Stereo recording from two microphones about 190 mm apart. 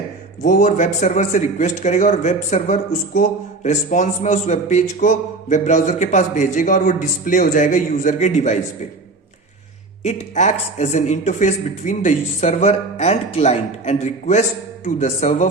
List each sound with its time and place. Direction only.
0.4 s speech: 45° left (ahead or behind)
10.0 s speech: 40° left (ahead or behind)